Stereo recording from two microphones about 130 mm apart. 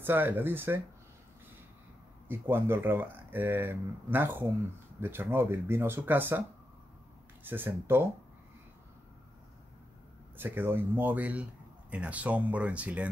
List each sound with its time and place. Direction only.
0.0 s speech: 15° right (ahead or behind)
2.2 s speech: 15° right (ahead or behind)
7.4 s speech: 15° right (ahead or behind)
10.3 s speech: 15° right (ahead or behind)